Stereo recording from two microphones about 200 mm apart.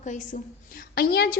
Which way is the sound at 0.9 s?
50° left (ahead or behind).